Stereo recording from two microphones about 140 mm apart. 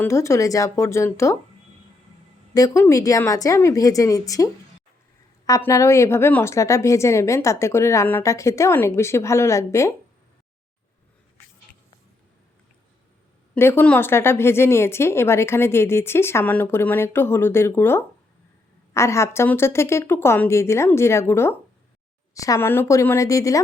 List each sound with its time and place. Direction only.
0.0 s a woman's voice: 20° left (ahead or behind)
2.6 s a woman's voice: 20° left (ahead or behind)
5.5 s a woman's voice: 20° left (ahead or behind)
13.5 s a woman's voice: 15° left (ahead or behind)